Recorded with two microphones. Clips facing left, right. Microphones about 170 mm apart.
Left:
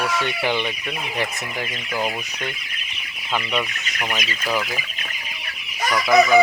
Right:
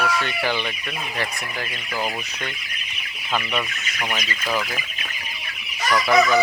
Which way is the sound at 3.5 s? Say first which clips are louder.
Left 2 dB; 15° left (ahead or behind).